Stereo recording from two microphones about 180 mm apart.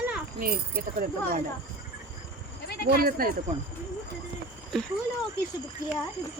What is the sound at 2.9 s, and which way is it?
Speech, 55° right (ahead or behind).